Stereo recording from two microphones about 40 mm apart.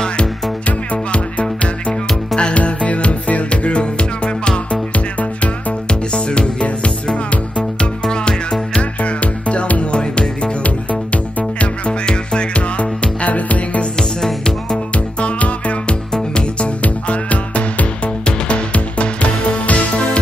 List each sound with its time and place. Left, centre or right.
0.7 s music: left
5.4 s music: left
8.1 s music: left
9.0 s music: left
12.1 s music: left
14.2 s music: left